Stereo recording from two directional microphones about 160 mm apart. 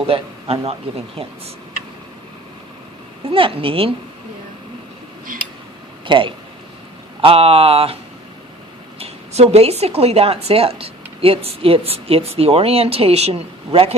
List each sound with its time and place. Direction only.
0.1 s speech: 35° right (ahead or behind)
3.2 s speech: 35° right (ahead or behind)
5.3 s tick-tock: 60° right (ahead or behind)
6.1 s speech: 30° right (ahead or behind)
9.0 s speech: 40° right (ahead or behind)